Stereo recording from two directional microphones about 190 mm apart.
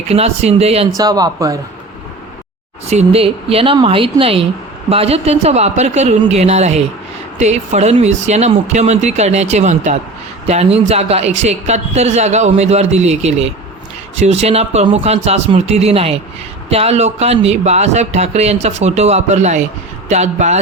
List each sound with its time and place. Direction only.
0.1 s a man's voice: 35° right (ahead or behind)
0.9 s speech: 20° right (ahead or behind)
2.8 s a man's voice: 35° right (ahead or behind)